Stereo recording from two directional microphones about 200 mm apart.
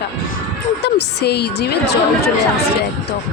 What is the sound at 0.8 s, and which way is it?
A woman's voice, 60° left (ahead or behind).